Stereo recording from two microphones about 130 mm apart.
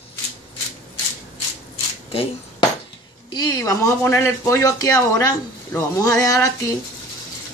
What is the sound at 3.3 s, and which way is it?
Speech, 30° left (ahead or behind).